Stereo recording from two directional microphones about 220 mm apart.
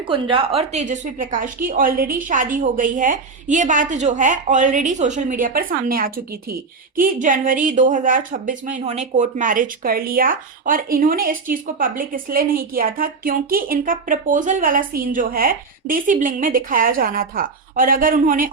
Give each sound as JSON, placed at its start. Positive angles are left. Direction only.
{"t": 0.1, "sound": "a woman's voice", "side_deg": -25}